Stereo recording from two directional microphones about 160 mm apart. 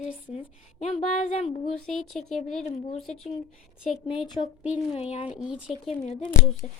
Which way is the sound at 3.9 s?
30° left (ahead or behind).